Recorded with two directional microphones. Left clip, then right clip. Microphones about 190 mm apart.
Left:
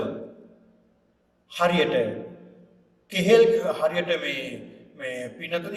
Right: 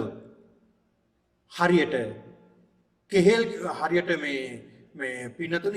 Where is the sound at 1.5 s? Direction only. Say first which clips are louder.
Even; 45° right (ahead or behind).